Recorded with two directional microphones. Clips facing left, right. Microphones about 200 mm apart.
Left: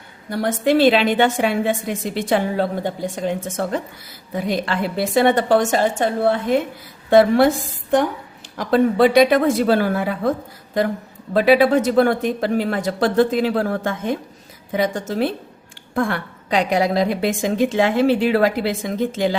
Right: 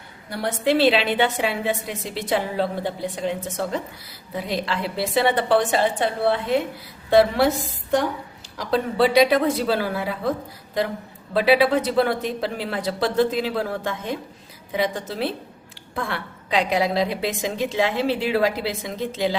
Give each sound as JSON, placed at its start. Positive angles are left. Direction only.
{"t": 0.3, "sound": "a woman's voice", "side_deg": 45}
{"t": 8.5, "sound": "a woman's voice", "side_deg": 55}
{"t": 11.3, "sound": "a woman's voice", "side_deg": 50}